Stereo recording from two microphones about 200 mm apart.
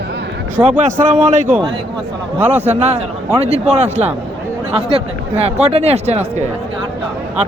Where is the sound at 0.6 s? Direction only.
35° right (ahead or behind).